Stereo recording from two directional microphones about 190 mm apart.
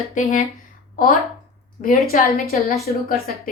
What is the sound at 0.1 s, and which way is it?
Speech, 40° left (ahead or behind).